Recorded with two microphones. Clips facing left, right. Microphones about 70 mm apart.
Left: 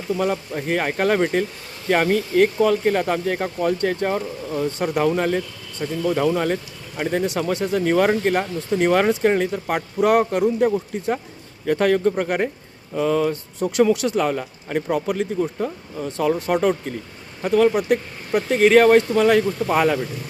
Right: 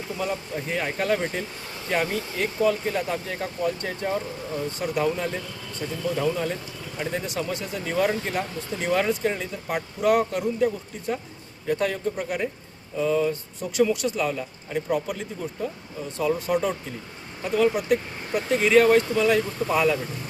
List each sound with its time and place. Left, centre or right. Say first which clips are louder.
0.2 s speech: left 6 dB; left
11.6 s speech: left 7 dB; left